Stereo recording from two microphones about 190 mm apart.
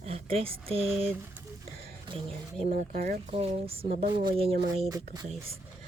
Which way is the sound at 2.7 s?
45° right (ahead or behind).